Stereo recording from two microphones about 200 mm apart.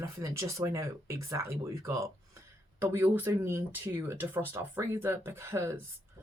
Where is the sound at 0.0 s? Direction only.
15° right (ahead or behind).